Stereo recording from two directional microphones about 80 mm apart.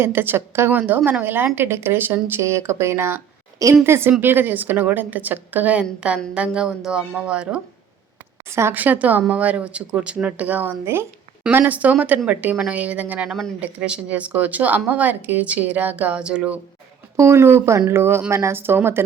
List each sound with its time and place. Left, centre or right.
0.0 s speech: right
0.7 s a woman's voice: right
2.4 s a woman's voice: right; by 7.6 s centre
8.4 s speech: right
8.7 s a woman's voice: right
17.2 s speech: right